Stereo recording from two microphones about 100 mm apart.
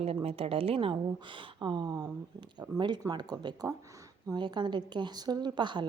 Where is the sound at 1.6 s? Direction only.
45° right (ahead or behind).